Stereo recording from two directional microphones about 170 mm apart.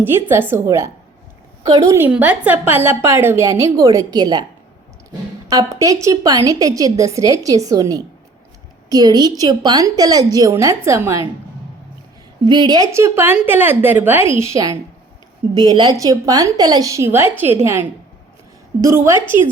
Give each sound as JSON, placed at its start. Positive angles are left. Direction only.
{"t": 0.0, "sound": "a woman's voice", "side_deg": -15}
{"t": 5.5, "sound": "a woman's voice", "side_deg": -20}
{"t": 12.5, "sound": "a woman's voice", "side_deg": -25}